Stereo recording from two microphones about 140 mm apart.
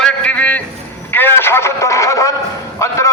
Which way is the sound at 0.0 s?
10° left (ahead or behind).